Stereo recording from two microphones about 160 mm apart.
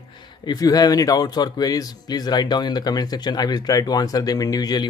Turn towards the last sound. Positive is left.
turn(degrees=25)  # may be behind; listen again after turning